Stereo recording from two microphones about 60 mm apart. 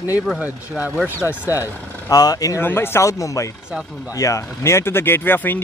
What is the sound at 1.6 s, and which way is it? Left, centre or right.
Speech, left.